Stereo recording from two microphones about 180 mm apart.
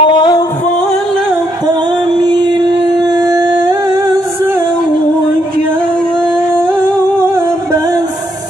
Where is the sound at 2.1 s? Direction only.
25° right (ahead or behind).